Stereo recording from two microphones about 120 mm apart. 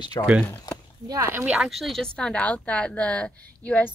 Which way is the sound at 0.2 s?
30° left (ahead or behind).